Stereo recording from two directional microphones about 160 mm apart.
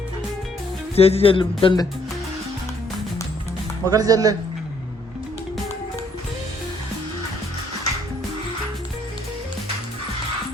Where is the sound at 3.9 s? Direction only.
20° right (ahead or behind).